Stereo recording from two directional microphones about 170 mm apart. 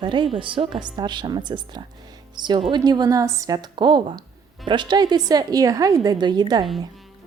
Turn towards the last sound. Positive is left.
turn(degrees=-25)  # may be behind; listen again after turning